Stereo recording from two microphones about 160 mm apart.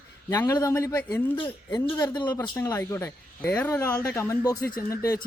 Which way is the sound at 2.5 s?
15° left (ahead or behind).